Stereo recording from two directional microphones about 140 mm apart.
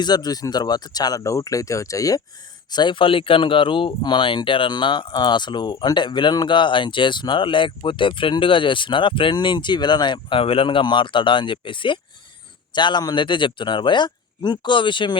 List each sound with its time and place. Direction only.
0.0 s speech: 30° left (ahead or behind)